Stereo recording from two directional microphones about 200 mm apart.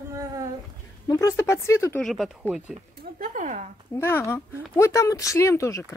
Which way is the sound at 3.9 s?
15° left (ahead or behind).